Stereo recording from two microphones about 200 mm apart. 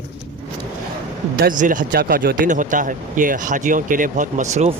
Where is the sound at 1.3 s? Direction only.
45° right (ahead or behind).